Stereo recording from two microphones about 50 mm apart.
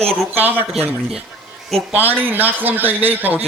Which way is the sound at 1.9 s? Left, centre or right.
Right.